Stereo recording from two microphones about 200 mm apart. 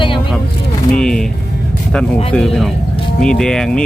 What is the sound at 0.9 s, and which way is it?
Music, 5° left (ahead or behind).